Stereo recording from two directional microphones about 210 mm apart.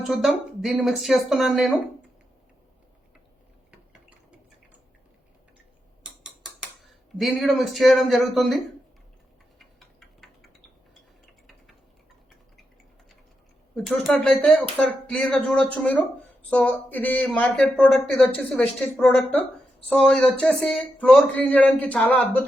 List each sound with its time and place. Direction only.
0.0 s speech: centre (ahead or behind)
6.2 s speech: centre (ahead or behind)
13.7 s speech: centre (ahead or behind)